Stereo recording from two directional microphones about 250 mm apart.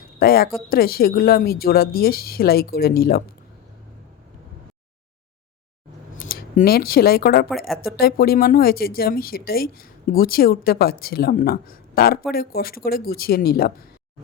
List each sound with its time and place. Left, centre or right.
0.2 s speech: left
6.1 s speech: left